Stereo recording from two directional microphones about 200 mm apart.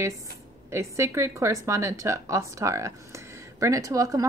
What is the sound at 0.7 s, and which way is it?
Speech, 15° right (ahead or behind).